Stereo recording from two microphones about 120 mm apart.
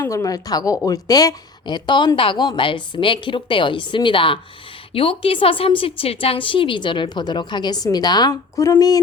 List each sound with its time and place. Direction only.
0.0 s a woman's voice: 25° left (ahead or behind)